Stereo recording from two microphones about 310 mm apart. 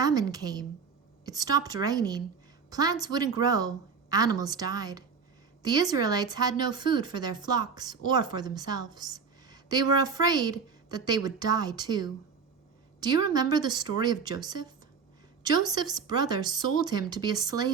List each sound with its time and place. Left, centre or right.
0.0 s speech: centre
15.7 s speech: centre